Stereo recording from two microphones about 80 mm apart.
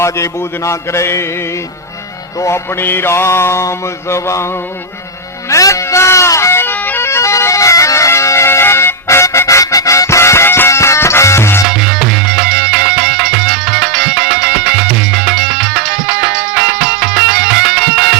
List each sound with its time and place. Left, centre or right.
0.0 s mantra: left
2.4 s mantra: left
5.5 s music: left
11.7 s music: centre
15.1 s music: centre
16.1 s music: centre